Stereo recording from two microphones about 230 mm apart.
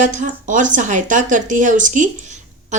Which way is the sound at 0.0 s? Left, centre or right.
Right.